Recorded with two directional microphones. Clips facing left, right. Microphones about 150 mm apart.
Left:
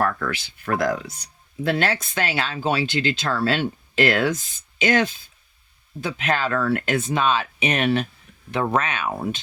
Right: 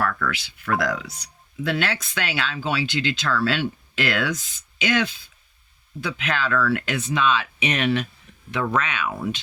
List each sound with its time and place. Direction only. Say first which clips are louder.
0.0 s a sound: left 2 dB; 35° left (ahead or behind)
0.4 s speech: left 2 dB; 45° left (ahead or behind)
8.5 s speech: left 2 dB; 35° left (ahead or behind)